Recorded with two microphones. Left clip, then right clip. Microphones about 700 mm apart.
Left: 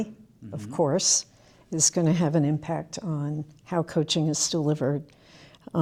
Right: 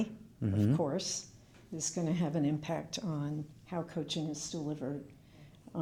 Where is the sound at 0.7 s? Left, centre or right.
Left.